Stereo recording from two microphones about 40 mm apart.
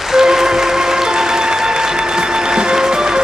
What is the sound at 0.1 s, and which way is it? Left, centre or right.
Music, centre.